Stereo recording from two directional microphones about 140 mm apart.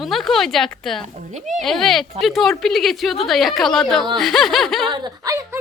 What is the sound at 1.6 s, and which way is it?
Speech, 5° left (ahead or behind).